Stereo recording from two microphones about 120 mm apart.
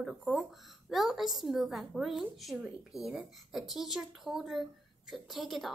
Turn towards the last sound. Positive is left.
turn(degrees=0)  # may be behind; listen again after turning